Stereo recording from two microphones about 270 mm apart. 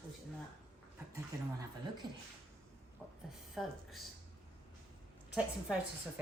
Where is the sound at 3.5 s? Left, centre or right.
Centre.